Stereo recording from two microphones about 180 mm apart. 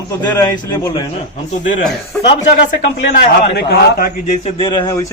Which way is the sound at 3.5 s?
60° left (ahead or behind).